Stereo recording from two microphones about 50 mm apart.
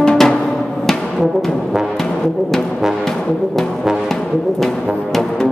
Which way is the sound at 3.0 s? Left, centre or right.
Centre.